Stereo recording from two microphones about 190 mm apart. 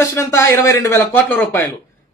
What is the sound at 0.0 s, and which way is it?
Speech, 15° left (ahead or behind).